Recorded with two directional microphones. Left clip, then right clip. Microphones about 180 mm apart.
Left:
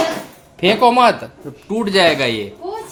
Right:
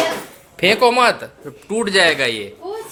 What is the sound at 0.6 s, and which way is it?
Speech, centre (ahead or behind).